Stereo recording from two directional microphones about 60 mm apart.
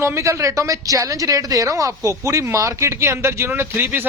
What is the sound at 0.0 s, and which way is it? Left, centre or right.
Speech, right.